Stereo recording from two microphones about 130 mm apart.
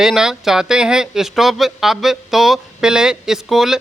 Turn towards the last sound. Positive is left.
turn(degrees=-5)  # may be behind; listen again after turning